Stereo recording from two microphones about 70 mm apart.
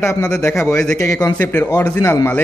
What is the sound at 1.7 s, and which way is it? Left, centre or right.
Speech, left.